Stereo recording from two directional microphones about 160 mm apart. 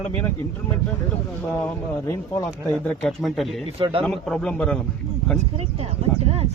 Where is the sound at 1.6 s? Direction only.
15° left (ahead or behind).